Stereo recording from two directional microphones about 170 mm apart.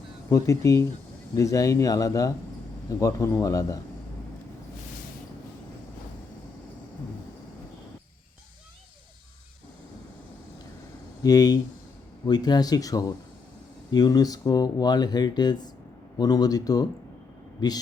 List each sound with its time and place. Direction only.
0.3 s speech: 20° left (ahead or behind)
11.2 s speech: 20° left (ahead or behind)